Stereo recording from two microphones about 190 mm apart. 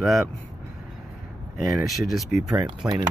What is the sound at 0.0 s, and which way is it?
Speech, centre (ahead or behind).